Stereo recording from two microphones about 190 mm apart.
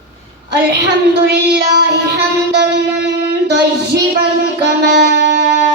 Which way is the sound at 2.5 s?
65° right (ahead or behind).